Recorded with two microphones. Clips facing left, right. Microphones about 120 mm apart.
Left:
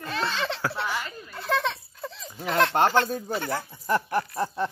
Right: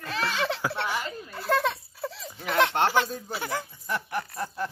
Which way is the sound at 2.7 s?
40° left (ahead or behind).